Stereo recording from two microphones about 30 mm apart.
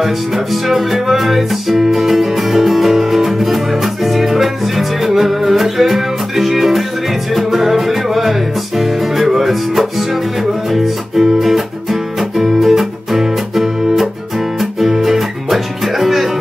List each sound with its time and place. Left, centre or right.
0.0 s music: centre